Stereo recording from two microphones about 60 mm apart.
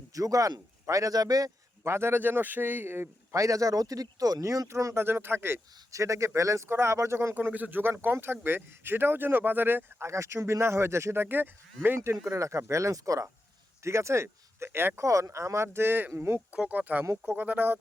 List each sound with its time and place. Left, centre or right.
0.1 s speech: right
1.8 s speech: right
3.3 s speech: right
4.7 s speech: right
4.9 s speech: right
5.9 s speech: right
6.7 s speech: right
7.5 s speech: right
10.1 s speech: right
12.2 s speech: right
13.8 s speech: right
15.0 s speech: right
16.5 s speech: right